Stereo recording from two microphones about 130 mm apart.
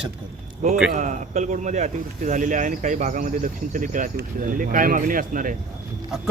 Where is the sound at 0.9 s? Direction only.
75° right (ahead or behind); by 5.5 s 90° right.